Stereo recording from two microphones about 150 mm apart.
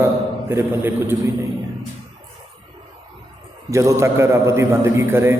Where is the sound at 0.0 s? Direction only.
15° right (ahead or behind).